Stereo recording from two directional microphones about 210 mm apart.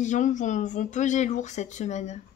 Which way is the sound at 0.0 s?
35° left (ahead or behind).